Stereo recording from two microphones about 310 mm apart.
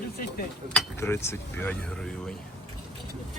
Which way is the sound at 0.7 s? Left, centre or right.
Centre.